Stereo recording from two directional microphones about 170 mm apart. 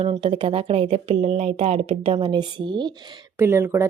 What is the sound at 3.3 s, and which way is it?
Speech, 15° right (ahead or behind).